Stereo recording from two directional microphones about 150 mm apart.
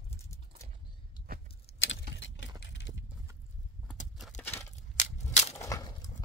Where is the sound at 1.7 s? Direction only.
45° left (ahead or behind).